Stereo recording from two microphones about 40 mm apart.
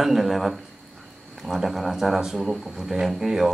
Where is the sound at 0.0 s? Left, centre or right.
Centre.